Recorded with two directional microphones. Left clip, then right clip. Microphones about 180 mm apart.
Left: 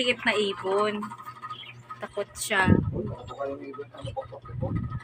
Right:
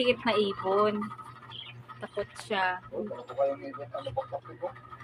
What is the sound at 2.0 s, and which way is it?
Speech, centre (ahead or behind).